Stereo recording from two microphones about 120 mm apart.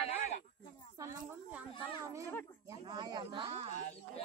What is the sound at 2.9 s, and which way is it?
Speech, 40° right (ahead or behind).